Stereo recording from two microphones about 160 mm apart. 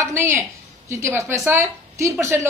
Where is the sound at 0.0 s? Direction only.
15° right (ahead or behind).